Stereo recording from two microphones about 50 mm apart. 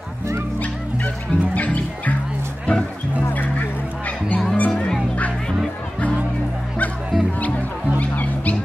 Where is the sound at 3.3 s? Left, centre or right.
Left.